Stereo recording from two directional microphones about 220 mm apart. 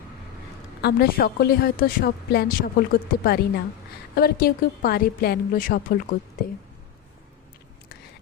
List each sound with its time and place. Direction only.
0.8 s a woman's voice: 45° left (ahead or behind)